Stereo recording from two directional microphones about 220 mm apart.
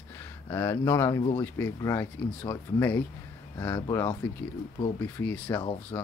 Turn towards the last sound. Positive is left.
turn(degrees=15)  # may be behind; listen again after turning